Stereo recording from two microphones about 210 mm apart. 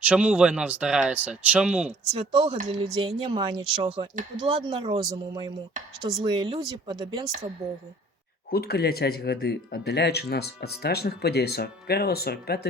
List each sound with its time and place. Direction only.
0.0 s speech: 5° right (ahead or behind)
2.1 s speech: 25° right (ahead or behind)
8.5 s speech: 50° left (ahead or behind)